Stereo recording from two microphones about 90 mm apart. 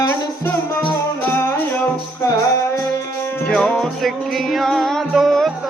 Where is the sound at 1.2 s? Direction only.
25° left (ahead or behind).